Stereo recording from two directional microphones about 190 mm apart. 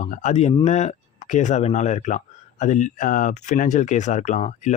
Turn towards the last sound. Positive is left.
turn(degrees=40)  # may be behind; listen again after turning